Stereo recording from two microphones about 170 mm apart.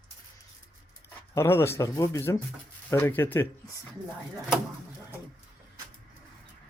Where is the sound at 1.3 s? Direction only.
15° left (ahead or behind).